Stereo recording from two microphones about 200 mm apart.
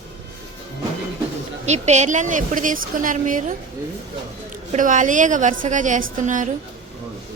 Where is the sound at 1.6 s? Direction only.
35° right (ahead or behind).